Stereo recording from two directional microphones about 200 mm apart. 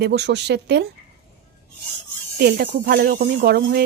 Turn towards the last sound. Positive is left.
turn(degrees=-50)  # may be behind; listen again after turning